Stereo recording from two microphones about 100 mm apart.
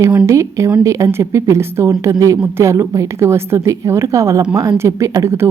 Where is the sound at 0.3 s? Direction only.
30° right (ahead or behind).